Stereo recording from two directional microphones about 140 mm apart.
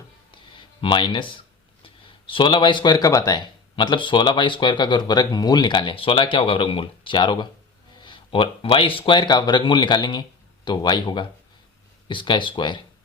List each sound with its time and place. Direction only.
0.8 s speech: 35° left (ahead or behind)